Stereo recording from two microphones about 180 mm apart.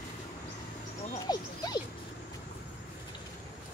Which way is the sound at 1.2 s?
20° left (ahead or behind).